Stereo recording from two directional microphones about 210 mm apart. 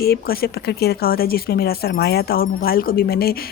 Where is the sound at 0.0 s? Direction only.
45° left (ahead or behind).